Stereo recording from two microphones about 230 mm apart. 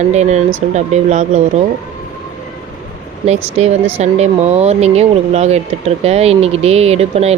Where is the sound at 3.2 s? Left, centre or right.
Right.